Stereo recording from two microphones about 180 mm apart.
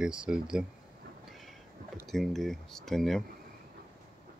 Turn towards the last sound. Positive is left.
turn(degrees=0)  # may be behind; listen again after turning